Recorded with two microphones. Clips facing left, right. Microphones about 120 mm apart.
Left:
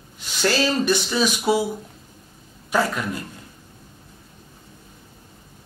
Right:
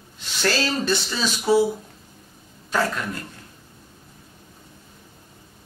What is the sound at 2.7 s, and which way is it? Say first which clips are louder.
Speech: left 2 dB; 15° left (ahead or behind).